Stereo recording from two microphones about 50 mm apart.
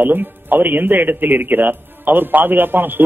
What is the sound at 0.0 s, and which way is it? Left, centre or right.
Speech, right.